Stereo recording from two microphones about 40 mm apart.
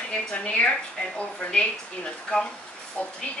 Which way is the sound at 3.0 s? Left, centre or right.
Left.